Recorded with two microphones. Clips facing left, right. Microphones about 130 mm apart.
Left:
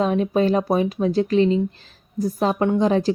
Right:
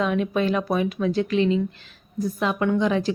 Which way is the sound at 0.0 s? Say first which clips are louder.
Left 3 dB; 35° left (ahead or behind).